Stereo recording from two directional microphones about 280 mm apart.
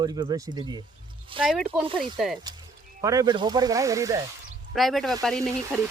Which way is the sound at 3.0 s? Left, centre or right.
Centre.